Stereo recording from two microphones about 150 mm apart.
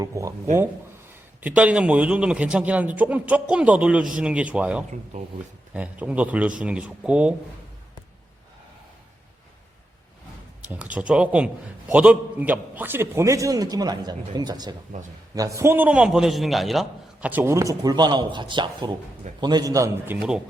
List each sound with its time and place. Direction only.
0.0 s a man's voice: 20° right (ahead or behind)
1.4 s a man's voice: 10° right (ahead or behind)
5.1 s speech: 50° right (ahead or behind)
5.7 s a man's voice: 10° right (ahead or behind)
10.6 s a man's voice: 10° right (ahead or behind)